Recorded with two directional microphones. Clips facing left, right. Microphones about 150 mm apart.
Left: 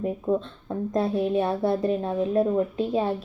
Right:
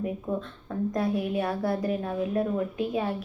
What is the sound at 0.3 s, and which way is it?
Speech, 25° left (ahead or behind).